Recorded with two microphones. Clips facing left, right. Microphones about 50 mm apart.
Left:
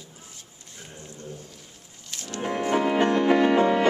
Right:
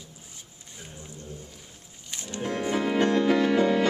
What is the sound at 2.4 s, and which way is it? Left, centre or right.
Music, left.